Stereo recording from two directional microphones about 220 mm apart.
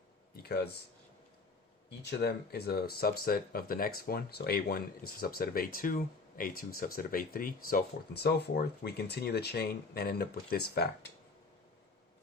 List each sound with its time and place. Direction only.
0.4 s speech: 45° left (ahead or behind)
2.0 s speech: 50° left (ahead or behind)